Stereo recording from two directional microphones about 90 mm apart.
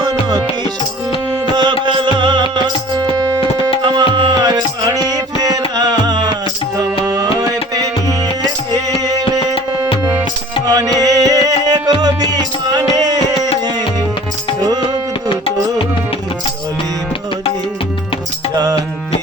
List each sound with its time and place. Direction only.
0.0 s music: 50° right (ahead or behind)
3.2 s music: 40° right (ahead or behind)
3.8 s music: 65° right (ahead or behind)
8.7 s music: 45° right (ahead or behind)
18.5 s music: 45° right (ahead or behind)